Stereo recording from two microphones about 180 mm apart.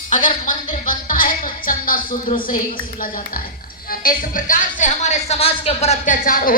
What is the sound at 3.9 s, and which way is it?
Speech, 50° left (ahead or behind).